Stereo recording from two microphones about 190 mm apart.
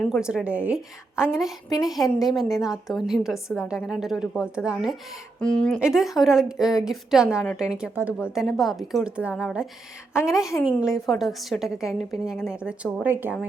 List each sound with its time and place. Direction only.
0.0 s a woman's voice: centre (ahead or behind)
3.3 s a woman's voice: 10° left (ahead or behind)
3.7 s a woman's voice: centre (ahead or behind)
10.2 s a woman's voice: 15° left (ahead or behind)
10.6 s a woman's voice: 5° right (ahead or behind)